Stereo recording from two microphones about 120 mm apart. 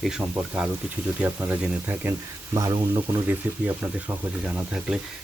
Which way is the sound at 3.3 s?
15° right (ahead or behind).